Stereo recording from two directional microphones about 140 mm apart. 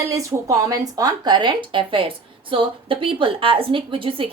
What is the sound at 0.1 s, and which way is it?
Speech, 25° right (ahead or behind).